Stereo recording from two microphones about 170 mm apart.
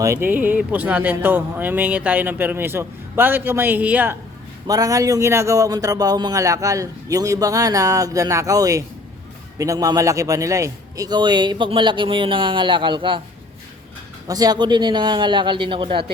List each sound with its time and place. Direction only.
0.0 s speech: 15° right (ahead or behind)
4.6 s a man's voice: 20° right (ahead or behind)
14.3 s a man's voice: 25° right (ahead or behind)